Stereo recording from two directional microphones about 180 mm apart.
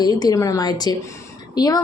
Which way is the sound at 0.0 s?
20° left (ahead or behind).